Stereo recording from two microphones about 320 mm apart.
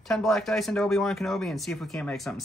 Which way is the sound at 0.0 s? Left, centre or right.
Centre.